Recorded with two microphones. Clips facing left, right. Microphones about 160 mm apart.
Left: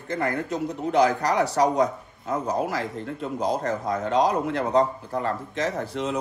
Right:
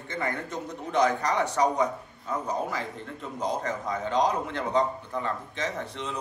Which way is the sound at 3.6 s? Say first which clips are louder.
Left 4 dB; 40° left (ahead or behind).